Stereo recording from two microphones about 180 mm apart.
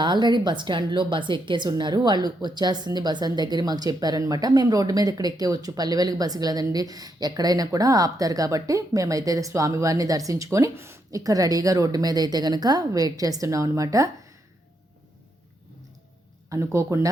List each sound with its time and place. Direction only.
0.0 s a woman's voice: 25° right (ahead or behind)
16.5 s speech: 15° right (ahead or behind)